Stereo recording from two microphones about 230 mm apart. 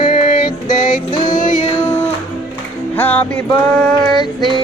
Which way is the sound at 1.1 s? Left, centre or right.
Centre.